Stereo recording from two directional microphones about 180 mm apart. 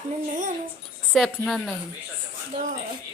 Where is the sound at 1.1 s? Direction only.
Centre (ahead or behind).